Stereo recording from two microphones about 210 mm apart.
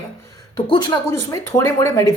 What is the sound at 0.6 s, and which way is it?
Speech, 20° left (ahead or behind).